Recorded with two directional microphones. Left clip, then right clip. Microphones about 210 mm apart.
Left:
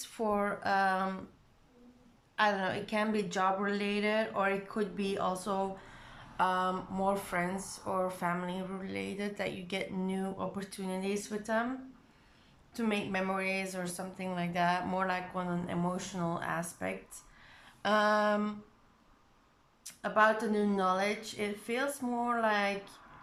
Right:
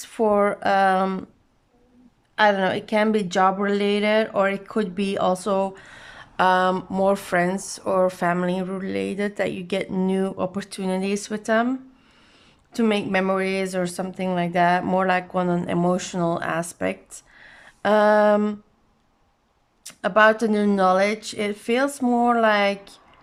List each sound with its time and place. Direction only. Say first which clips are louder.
0.0 s a woman's voice: right 13 dB; 40° right (ahead or behind)
2.3 s a woman's voice: right 11 dB; 40° right (ahead or behind)
12.7 s a woman's voice: right 12 dB; 45° right (ahead or behind)
19.8 s a woman's voice: right 11 dB; 45° right (ahead or behind)